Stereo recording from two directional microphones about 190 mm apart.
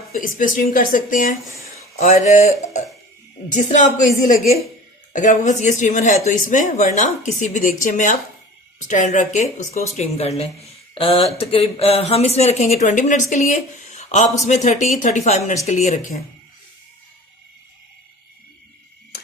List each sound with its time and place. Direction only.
0.1 s speech: 45° left (ahead or behind)
3.5 s speech: 40° left (ahead or behind)